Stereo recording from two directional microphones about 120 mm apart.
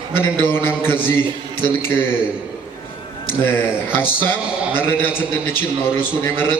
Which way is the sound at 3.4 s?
20° left (ahead or behind).